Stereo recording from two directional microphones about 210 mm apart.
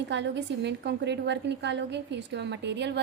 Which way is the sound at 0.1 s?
55° right (ahead or behind).